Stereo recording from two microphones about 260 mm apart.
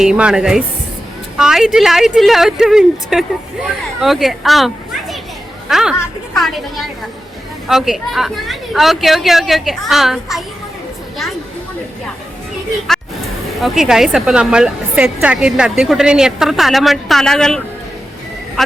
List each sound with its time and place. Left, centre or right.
0.0 s a woman's voice: centre
13.6 s speech: centre